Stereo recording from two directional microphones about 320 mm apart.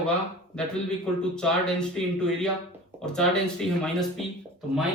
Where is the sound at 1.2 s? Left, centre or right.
Centre.